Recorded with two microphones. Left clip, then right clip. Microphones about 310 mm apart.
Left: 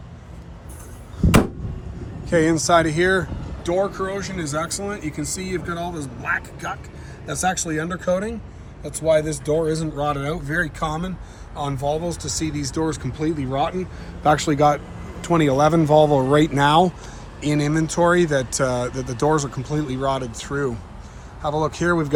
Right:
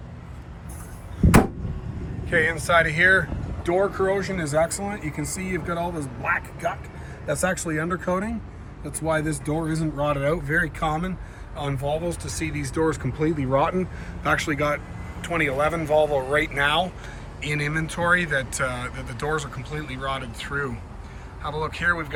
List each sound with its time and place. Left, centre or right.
2.6 s speech: centre